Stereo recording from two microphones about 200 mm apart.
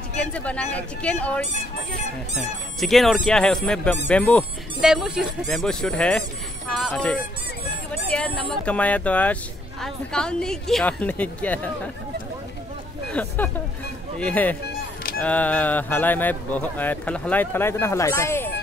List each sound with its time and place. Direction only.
0.2 s speech: 5° left (ahead or behind)
2.8 s speech: centre (ahead or behind)
13.1 s speech: 5° left (ahead or behind)